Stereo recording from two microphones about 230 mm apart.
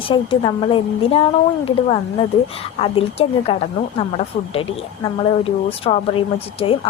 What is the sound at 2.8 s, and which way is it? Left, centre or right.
Speech, left.